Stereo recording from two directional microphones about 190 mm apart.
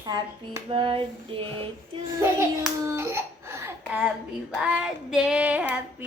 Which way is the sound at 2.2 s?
15° right (ahead or behind).